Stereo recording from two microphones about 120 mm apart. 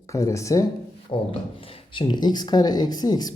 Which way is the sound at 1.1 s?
45° left (ahead or behind).